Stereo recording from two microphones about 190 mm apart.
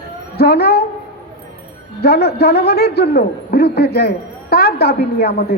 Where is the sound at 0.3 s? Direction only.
55° left (ahead or behind).